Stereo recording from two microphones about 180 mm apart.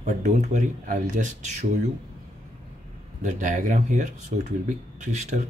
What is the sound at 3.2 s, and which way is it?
Speech, 45° right (ahead or behind).